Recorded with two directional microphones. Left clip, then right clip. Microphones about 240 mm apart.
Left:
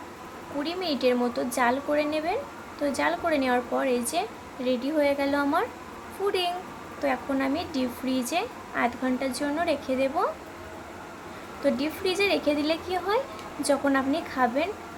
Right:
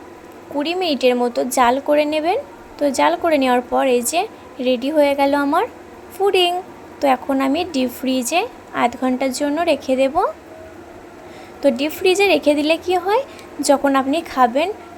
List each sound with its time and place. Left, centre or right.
0.6 s speech: right
11.6 s speech: right